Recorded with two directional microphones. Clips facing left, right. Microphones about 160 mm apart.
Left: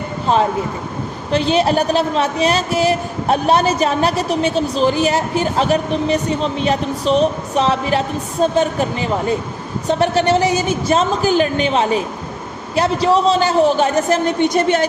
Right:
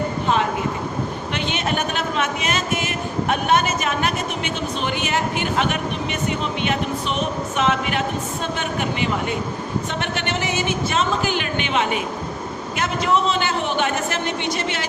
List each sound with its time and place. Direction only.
1.3 s a woman's voice: 35° left (ahead or behind)